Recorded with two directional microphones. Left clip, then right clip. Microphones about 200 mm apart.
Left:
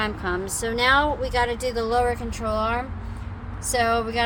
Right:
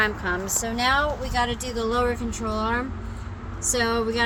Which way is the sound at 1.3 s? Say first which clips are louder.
Left 2 dB; 30° left (ahead or behind).